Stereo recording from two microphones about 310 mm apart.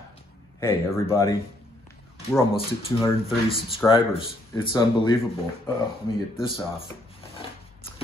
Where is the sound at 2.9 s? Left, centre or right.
Centre.